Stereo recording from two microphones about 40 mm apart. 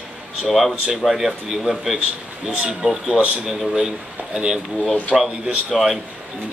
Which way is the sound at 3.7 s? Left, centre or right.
Centre.